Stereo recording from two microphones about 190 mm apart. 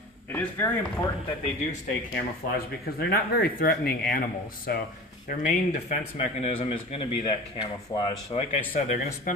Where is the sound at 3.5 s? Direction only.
50° left (ahead or behind).